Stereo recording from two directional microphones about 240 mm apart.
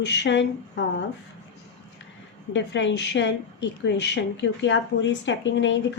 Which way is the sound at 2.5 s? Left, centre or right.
Left.